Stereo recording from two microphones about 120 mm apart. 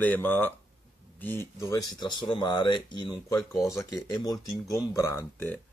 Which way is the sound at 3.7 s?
25° left (ahead or behind).